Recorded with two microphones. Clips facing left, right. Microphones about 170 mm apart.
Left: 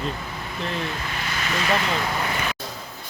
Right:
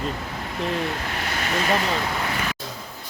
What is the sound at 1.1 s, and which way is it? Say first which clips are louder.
Vehicle: right 2 dB; 60° right (ahead or behind).